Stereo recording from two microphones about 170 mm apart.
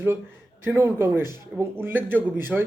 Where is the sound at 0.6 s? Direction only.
15° right (ahead or behind).